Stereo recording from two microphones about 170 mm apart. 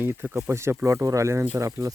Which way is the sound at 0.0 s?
15° right (ahead or behind).